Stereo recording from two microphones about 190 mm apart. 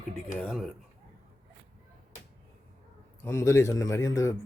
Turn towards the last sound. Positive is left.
turn(degrees=15)  # may be behind; listen again after turning